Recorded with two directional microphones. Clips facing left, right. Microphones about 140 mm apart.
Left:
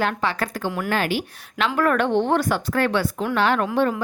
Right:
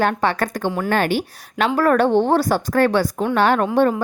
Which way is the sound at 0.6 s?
30° right (ahead or behind).